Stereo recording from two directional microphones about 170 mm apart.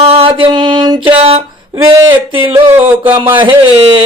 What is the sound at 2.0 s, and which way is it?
Speech, 30° right (ahead or behind).